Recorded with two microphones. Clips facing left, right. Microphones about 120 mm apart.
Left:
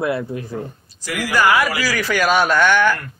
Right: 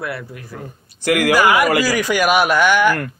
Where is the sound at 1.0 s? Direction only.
60° right (ahead or behind).